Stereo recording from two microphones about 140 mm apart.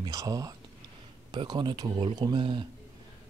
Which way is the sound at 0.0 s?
25° right (ahead or behind).